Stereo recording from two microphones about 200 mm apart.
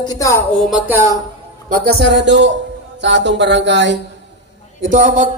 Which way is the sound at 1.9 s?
60° right (ahead or behind).